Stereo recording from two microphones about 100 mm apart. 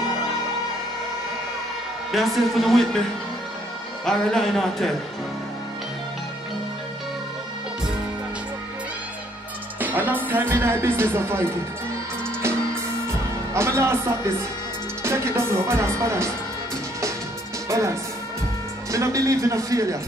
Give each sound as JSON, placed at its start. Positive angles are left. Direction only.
{"t": 2.1, "sound": "speech", "side_deg": 0}
{"t": 4.0, "sound": "speech", "side_deg": 5}
{"t": 9.8, "sound": "speech", "side_deg": -20}
{"t": 13.5, "sound": "speech", "side_deg": -25}
{"t": 17.6, "sound": "music", "side_deg": -30}
{"t": 18.9, "sound": "a man's voice", "side_deg": -30}